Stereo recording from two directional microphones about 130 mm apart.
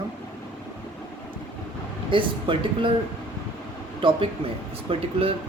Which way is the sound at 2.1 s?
40° right (ahead or behind).